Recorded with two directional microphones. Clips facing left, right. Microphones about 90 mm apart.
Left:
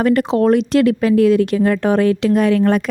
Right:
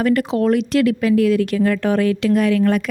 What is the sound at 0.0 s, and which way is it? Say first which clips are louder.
Speech: left 3 dB; 30° left (ahead or behind).